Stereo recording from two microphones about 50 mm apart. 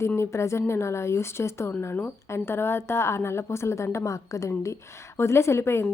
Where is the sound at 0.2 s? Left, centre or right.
Left.